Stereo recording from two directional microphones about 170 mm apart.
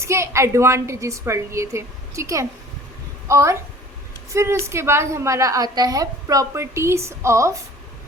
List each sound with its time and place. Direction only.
0.0 s a woman's voice: 15° right (ahead or behind)